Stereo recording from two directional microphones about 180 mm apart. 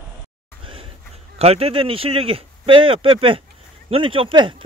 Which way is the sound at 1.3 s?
35° right (ahead or behind).